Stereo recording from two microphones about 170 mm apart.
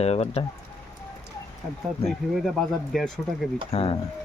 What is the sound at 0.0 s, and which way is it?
Speech, 40° left (ahead or behind).